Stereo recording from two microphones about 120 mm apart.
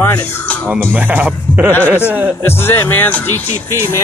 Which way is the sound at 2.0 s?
15° right (ahead or behind).